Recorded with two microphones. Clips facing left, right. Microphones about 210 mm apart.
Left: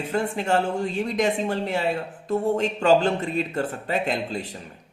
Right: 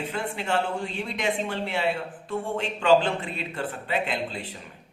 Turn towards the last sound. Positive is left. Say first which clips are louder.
# left 4 dB
turn(degrees=40)  # may be behind; listen again after turning